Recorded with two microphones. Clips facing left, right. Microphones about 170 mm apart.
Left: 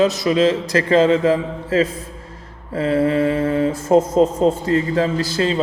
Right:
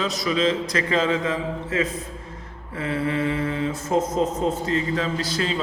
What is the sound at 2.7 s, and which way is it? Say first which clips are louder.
Mantra: left 8 dB; 40° left (ahead or behind).